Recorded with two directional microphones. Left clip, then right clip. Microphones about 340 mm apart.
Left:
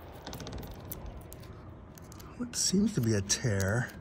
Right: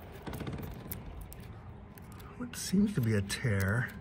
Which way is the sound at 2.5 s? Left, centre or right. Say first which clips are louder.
Left 3 dB; centre.